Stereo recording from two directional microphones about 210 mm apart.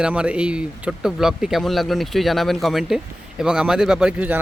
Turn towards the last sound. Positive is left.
turn(degrees=-5)  # may be behind; listen again after turning